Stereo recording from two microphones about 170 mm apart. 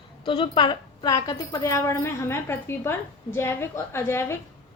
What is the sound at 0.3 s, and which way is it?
A woman's voice, 30° left (ahead or behind).